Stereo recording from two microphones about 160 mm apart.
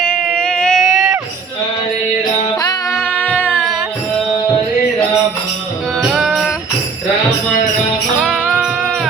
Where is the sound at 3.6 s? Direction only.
Centre (ahead or behind).